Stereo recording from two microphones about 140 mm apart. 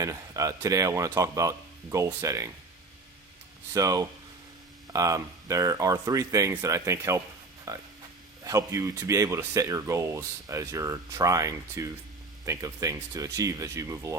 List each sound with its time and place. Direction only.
0.0 s speech: 25° right (ahead or behind)
3.8 s speech: 25° right (ahead or behind)